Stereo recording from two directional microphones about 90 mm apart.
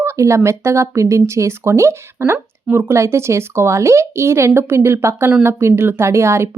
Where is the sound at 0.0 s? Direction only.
30° right (ahead or behind).